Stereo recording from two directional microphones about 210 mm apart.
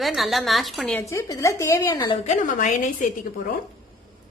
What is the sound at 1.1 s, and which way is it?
A woman's voice, 15° left (ahead or behind).